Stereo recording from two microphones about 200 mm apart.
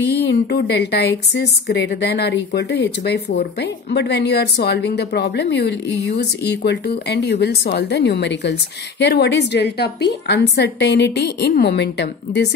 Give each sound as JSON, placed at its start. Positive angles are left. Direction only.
{"t": 0.0, "sound": "a woman's voice", "side_deg": 55}